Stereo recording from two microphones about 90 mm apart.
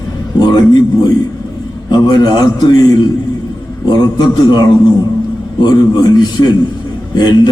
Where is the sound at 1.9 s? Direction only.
55° left (ahead or behind).